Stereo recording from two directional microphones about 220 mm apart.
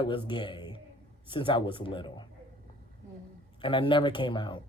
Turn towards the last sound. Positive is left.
turn(degrees=20)  # may be behind; listen again after turning